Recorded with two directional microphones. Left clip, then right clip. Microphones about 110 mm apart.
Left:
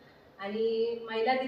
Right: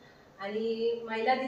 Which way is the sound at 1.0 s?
15° left (ahead or behind).